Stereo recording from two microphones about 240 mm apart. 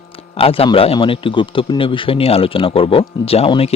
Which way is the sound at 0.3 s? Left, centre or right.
Left.